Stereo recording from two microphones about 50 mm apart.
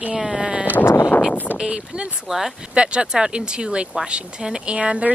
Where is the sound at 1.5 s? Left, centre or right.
Centre.